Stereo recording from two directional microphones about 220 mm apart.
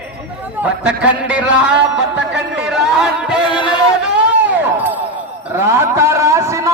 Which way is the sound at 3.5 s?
20° left (ahead or behind).